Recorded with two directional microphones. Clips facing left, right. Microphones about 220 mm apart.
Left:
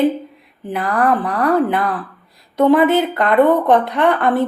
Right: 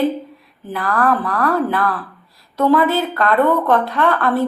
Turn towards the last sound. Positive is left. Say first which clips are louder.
# left 2 dB
turn(degrees=20)  # may be behind; listen again after turning